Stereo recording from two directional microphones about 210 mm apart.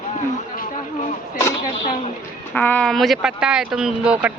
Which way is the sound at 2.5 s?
5° left (ahead or behind).